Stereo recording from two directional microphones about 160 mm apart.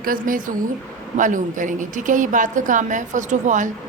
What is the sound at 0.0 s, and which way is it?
A woman's voice, 60° right (ahead or behind).